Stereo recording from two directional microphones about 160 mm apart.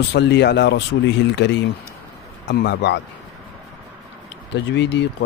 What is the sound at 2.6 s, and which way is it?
Speech, 90° left.